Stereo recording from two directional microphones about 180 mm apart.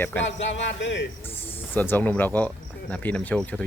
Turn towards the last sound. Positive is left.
turn(degrees=5)  # may be behind; listen again after turning